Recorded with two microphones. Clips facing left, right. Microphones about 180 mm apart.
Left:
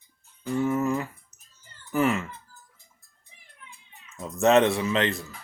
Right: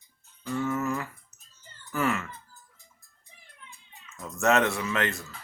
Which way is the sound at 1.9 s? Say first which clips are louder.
Left 4 dB; 20° left (ahead or behind).